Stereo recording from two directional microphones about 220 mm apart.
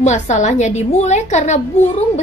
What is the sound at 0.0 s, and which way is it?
A woman's voice, 30° left (ahead or behind).